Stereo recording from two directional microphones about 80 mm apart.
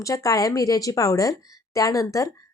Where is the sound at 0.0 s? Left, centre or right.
Left.